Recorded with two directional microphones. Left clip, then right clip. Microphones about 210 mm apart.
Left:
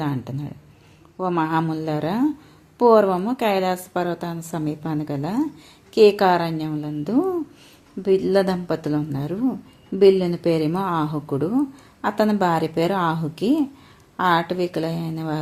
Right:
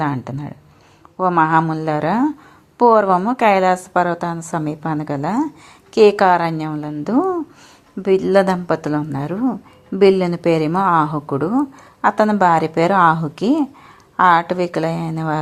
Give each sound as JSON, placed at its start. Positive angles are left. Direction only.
{"t": 0.0, "sound": "a woman's voice", "side_deg": -15}